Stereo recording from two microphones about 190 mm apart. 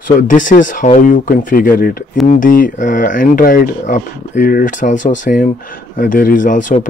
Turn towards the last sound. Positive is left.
turn(degrees=45)  # may be behind; listen again after turning